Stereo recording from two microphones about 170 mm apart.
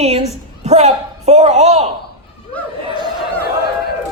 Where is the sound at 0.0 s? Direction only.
40° right (ahead or behind).